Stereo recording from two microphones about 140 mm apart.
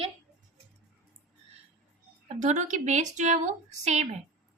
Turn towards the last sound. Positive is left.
turn(degrees=-55)  # may be behind; listen again after turning